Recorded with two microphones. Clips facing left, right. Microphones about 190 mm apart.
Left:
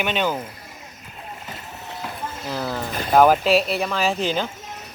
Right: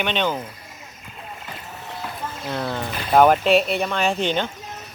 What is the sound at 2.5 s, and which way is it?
Speech, centre (ahead or behind).